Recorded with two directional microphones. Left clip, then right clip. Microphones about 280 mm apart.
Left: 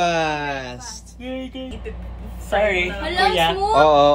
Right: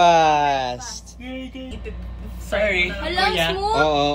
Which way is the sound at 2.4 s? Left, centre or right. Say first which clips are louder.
Left 1 dB; centre.